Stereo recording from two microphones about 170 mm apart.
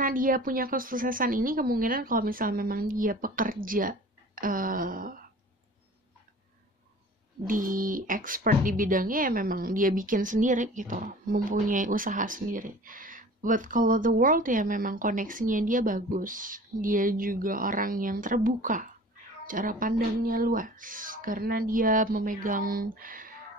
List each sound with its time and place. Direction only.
0.0 s a woman's voice: 55° right (ahead or behind)
7.4 s speech: 55° right (ahead or behind)